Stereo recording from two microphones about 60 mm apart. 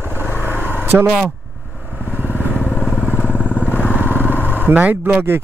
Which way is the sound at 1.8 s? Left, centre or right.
Right.